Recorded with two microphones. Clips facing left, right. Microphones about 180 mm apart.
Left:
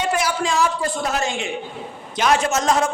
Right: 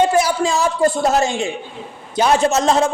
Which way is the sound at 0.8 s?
40° right (ahead or behind).